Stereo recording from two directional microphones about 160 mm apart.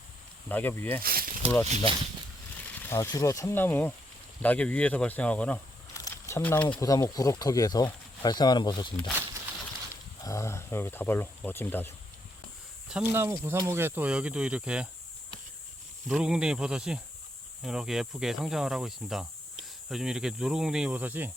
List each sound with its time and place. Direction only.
0.4 s speech: 10° left (ahead or behind)
1.0 s speech: 65° right (ahead or behind)
1.6 s speech: 45° right (ahead or behind)
2.6 s speech: 10° left (ahead or behind)
5.9 s a sound: 15° left (ahead or behind)
6.7 s speech: 20° left (ahead or behind)
9.9 s speech: 20° left (ahead or behind)
12.9 s speech: 10° right (ahead or behind)
16.0 s speech: 5° right (ahead or behind)